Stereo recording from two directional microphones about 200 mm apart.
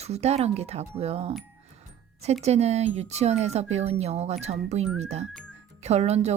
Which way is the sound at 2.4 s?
35° right (ahead or behind).